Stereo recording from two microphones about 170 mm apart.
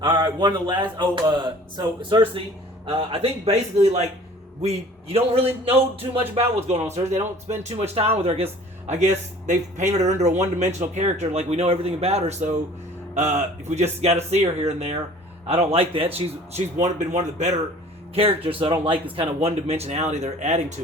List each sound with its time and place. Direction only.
0.0 s speech: 30° right (ahead or behind)
9.5 s speech: 45° right (ahead or behind)
18.1 s speech: 35° right (ahead or behind)